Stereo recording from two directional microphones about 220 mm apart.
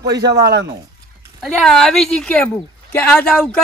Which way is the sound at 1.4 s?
Centre (ahead or behind).